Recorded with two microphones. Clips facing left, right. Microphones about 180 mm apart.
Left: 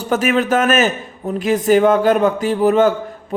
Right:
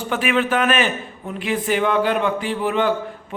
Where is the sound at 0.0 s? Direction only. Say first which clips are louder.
Left 4 dB; 40° left (ahead or behind).